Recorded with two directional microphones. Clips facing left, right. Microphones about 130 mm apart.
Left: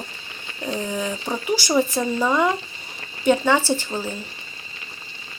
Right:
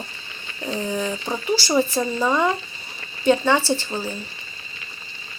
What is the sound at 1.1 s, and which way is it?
Speech, centre (ahead or behind).